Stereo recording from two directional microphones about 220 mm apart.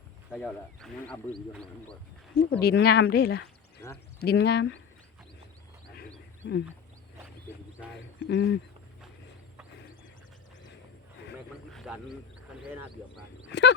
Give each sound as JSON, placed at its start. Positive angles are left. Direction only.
{"t": 0.3, "sound": "speech", "side_deg": 0}
{"t": 2.3, "sound": "speech", "side_deg": 45}
{"t": 3.8, "sound": "speech", "side_deg": 10}
{"t": 4.2, "sound": "speech", "side_deg": 50}
{"t": 8.3, "sound": "speech", "side_deg": 55}
{"t": 11.7, "sound": "a sound", "side_deg": 0}
{"t": 13.5, "sound": "a sound", "side_deg": 50}